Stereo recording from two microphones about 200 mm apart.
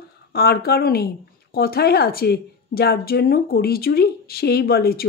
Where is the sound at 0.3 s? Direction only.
50° left (ahead or behind).